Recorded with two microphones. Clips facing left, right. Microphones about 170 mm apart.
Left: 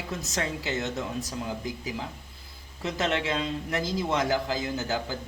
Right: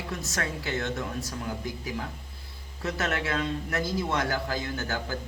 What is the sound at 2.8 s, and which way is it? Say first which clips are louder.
Speech: left 2 dB; 20° left (ahead or behind).